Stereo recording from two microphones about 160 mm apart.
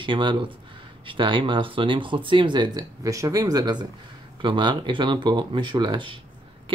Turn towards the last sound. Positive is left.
turn(degrees=-30)  # may be behind; listen again after turning